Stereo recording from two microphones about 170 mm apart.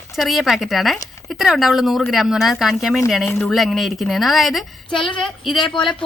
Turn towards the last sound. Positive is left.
turn(degrees=30)  # may be behind; listen again after turning